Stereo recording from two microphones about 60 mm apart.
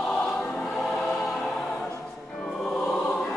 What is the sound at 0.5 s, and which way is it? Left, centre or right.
Choir, centre.